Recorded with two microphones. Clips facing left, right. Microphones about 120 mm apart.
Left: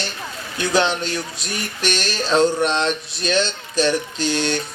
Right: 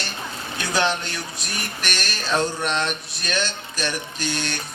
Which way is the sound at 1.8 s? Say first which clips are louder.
Left 8 dB; 25° left (ahead or behind).